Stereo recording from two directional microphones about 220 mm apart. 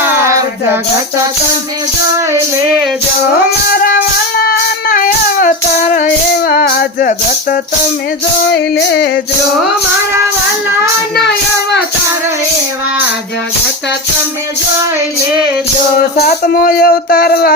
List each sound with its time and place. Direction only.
0.0 s a sound: 10° right (ahead or behind)
3.7 s music: 45° left (ahead or behind)
4.4 s child singing: 40° left (ahead or behind)
6.5 s music: 45° left (ahead or behind)
8.7 s male singing: 50° left (ahead or behind)
16.2 s speech: 40° left (ahead or behind)